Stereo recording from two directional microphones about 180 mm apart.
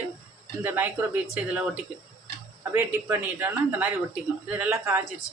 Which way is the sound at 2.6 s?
10° right (ahead or behind).